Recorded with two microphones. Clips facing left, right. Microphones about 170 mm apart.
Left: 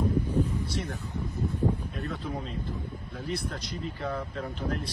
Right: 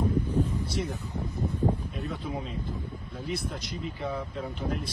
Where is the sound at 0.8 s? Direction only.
20° right (ahead or behind).